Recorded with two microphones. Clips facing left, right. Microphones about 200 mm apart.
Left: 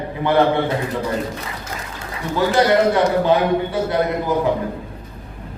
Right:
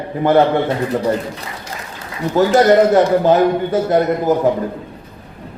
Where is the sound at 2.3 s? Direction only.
45° right (ahead or behind).